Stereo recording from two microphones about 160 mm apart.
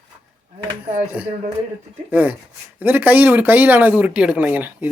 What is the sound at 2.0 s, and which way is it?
Speech, 10° right (ahead or behind).